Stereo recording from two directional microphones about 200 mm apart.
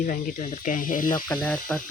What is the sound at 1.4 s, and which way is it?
Speech, 5° left (ahead or behind).